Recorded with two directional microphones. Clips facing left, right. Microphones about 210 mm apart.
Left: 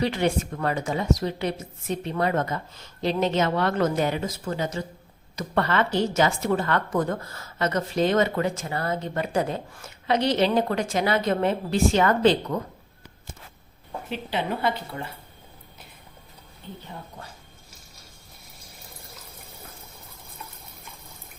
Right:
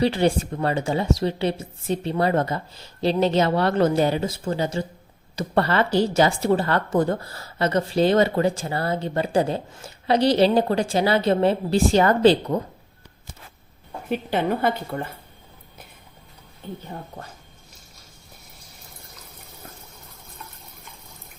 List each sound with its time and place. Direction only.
0.0 s a woman's voice: 30° right (ahead or behind)
14.1 s a woman's voice: 50° right (ahead or behind)
16.6 s speech: 50° right (ahead or behind)